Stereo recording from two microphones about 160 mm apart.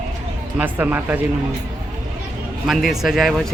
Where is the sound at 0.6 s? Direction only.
10° right (ahead or behind).